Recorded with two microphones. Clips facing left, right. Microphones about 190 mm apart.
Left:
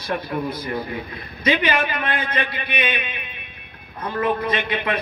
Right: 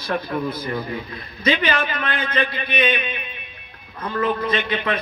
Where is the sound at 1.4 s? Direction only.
15° left (ahead or behind).